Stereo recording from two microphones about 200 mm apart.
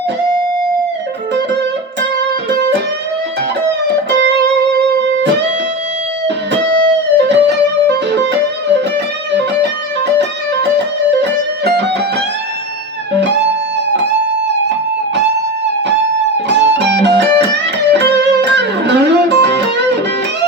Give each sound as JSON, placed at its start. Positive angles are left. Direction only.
{"t": 2.5, "sound": "music", "side_deg": -60}
{"t": 6.2, "sound": "music", "side_deg": -60}
{"t": 16.6, "sound": "music", "side_deg": -60}